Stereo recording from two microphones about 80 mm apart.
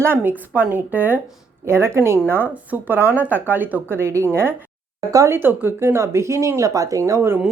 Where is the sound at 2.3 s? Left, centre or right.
Right.